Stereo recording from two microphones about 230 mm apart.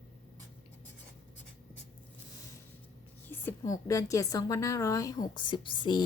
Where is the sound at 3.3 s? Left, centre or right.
Centre.